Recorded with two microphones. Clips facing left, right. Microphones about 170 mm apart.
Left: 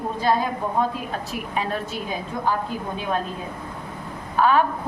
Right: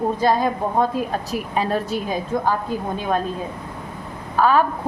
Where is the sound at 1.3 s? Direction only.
35° right (ahead or behind).